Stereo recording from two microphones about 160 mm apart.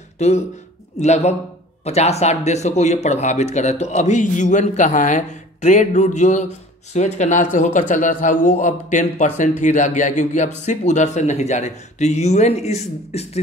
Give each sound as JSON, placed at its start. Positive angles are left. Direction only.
{"t": 0.2, "sound": "speech", "side_deg": 45}